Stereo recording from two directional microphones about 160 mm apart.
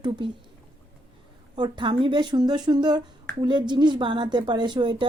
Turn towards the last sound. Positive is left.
turn(degrees=-30)  # may be behind; listen again after turning